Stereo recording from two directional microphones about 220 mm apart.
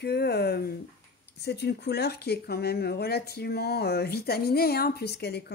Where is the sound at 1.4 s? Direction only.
50° left (ahead or behind).